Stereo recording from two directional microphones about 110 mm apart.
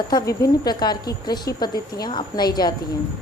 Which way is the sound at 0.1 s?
40° left (ahead or behind).